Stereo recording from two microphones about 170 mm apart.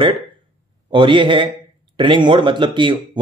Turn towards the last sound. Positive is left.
turn(degrees=-30)  # may be behind; listen again after turning